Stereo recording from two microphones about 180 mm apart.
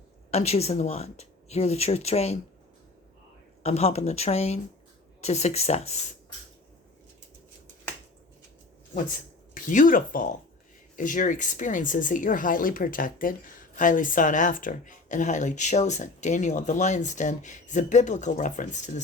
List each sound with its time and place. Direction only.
0.3 s speech: 35° left (ahead or behind)
3.6 s speech: 35° left (ahead or behind)
9.6 s speech: 45° left (ahead or behind)